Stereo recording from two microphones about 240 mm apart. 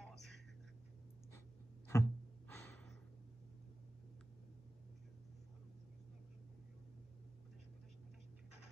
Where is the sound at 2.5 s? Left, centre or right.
Centre.